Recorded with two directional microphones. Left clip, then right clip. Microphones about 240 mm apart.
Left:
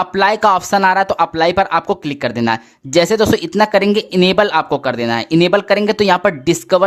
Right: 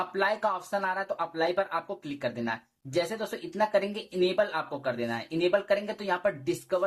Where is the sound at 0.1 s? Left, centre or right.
Left.